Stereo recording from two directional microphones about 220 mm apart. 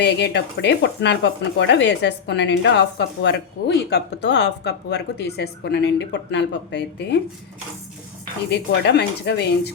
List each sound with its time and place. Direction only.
0.0 s speech: 50° left (ahead or behind)
8.4 s speech: 50° left (ahead or behind)